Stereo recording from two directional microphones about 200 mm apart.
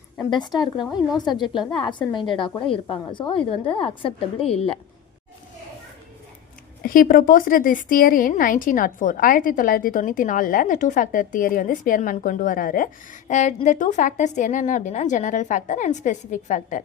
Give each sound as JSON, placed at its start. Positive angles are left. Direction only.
{"t": 0.2, "sound": "a woman's voice", "side_deg": 20}
{"t": 6.8, "sound": "a woman's voice", "side_deg": 45}